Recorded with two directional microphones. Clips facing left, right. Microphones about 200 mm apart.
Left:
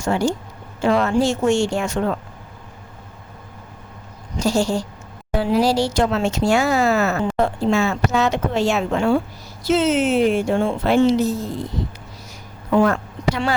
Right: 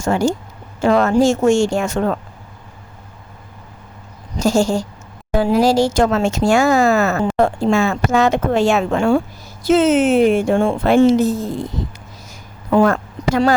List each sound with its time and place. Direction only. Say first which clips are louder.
0.0 s speech: right 3 dB; 45° right (ahead or behind)
4.4 s speech: right 3 dB; 45° right (ahead or behind)
12.9 s a sound: right 4 dB; 45° right (ahead or behind)